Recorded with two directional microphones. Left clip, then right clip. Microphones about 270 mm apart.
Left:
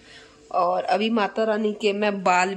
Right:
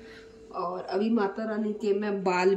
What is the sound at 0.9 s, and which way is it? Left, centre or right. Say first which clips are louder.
Speech: left 6 dB; left.